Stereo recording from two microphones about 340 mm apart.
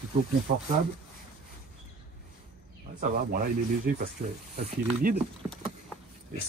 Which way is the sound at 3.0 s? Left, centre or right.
Right.